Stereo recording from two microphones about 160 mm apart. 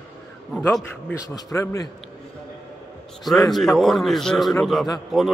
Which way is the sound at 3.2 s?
Centre (ahead or behind).